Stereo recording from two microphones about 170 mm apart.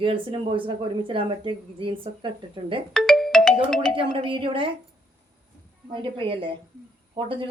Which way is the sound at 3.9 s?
30° right (ahead or behind).